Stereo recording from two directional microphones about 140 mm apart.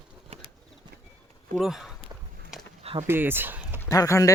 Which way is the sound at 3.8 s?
25° left (ahead or behind).